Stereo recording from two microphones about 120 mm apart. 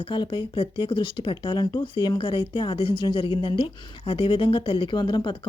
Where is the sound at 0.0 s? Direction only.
45° left (ahead or behind).